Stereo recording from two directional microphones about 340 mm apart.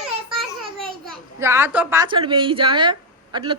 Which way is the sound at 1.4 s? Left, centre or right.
Centre.